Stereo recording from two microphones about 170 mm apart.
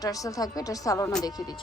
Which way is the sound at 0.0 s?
20° left (ahead or behind).